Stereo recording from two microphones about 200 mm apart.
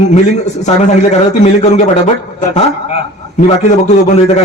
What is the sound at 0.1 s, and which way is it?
A man's voice, 35° left (ahead or behind).